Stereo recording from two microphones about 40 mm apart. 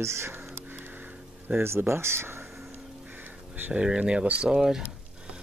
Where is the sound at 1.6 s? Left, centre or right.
Right.